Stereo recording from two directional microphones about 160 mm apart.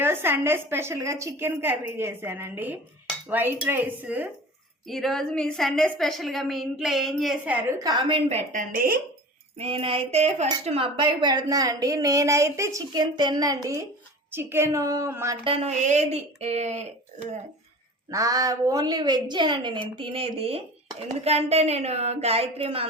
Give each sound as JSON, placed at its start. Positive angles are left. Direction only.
{"t": 0.0, "sound": "a woman's voice", "side_deg": -15}
{"t": 4.9, "sound": "a woman's voice", "side_deg": 0}
{"t": 7.9, "sound": "speech", "side_deg": -30}
{"t": 8.7, "sound": "speech", "side_deg": -70}
{"t": 9.6, "sound": "a woman's voice", "side_deg": -35}
{"t": 15.4, "sound": "speech", "side_deg": -40}
{"t": 18.1, "sound": "a woman's voice", "side_deg": -20}